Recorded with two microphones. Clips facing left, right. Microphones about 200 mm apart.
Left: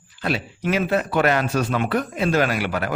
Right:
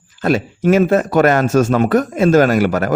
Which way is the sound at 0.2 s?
45° right (ahead or behind).